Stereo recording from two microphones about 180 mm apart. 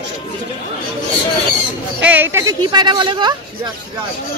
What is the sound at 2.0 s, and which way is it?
Speech, 10° right (ahead or behind).